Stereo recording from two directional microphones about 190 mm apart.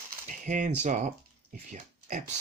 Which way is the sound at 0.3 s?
40° right (ahead or behind).